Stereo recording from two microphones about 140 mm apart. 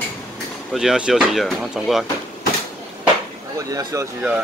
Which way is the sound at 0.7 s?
5° right (ahead or behind).